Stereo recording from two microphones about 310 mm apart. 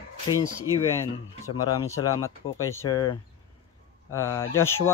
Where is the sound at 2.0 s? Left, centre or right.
Centre.